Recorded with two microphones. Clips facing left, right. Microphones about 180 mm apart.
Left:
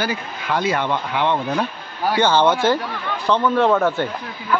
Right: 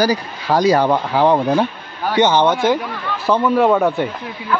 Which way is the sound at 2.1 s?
20° right (ahead or behind).